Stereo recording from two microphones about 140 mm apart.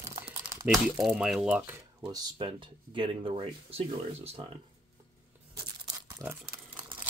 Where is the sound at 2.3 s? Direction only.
40° right (ahead or behind).